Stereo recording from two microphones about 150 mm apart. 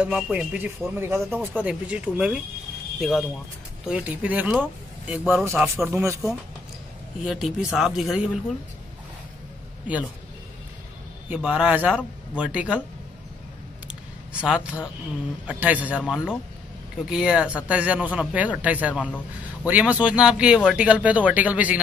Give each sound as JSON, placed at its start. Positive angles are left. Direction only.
{"t": 0.0, "sound": "a man's voice", "side_deg": -10}
{"t": 5.4, "sound": "a man's voice", "side_deg": -15}
{"t": 7.2, "sound": "speech", "side_deg": -5}
{"t": 9.9, "sound": "a man's voice", "side_deg": -10}
{"t": 11.2, "sound": "a man's voice", "side_deg": -10}
{"t": 14.4, "sound": "a man's voice", "side_deg": -5}